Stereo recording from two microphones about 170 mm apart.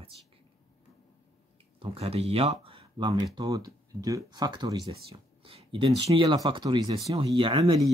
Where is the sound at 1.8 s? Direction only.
35° right (ahead or behind).